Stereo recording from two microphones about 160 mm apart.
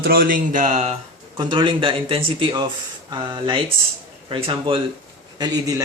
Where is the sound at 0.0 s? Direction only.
70° right (ahead or behind); by 0.9 s 45° right (ahead or behind).